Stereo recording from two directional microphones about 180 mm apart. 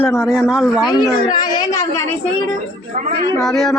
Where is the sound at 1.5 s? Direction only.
20° left (ahead or behind).